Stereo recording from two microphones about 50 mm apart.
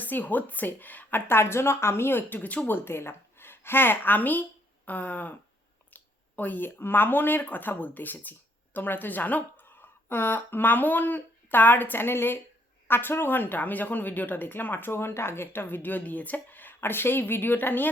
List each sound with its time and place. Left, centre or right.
0.0 s speech: left
1.3 s a woman's voice: left
2.4 s speech: left
2.6 s speech: left